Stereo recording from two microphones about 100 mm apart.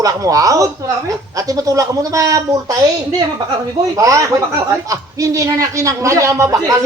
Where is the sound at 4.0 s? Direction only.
30° right (ahead or behind).